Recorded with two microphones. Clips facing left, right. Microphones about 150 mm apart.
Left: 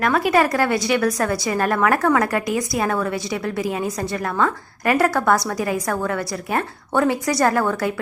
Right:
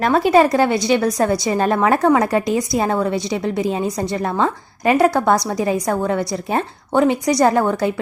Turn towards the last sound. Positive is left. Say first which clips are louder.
# right 3 dB
turn(degrees=-20)  # may be behind; listen again after turning